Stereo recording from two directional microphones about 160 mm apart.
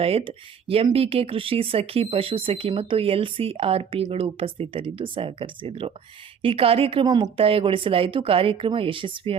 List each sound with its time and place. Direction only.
0.0 s speech: 35° right (ahead or behind)